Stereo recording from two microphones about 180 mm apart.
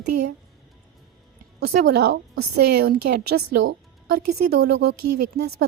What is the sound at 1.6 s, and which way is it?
A woman's voice, 60° right (ahead or behind).